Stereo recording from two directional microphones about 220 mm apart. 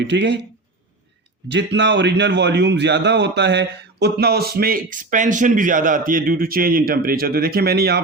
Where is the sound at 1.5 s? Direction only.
50° right (ahead or behind).